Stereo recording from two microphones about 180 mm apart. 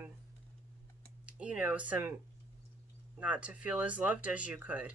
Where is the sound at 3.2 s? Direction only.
5° right (ahead or behind).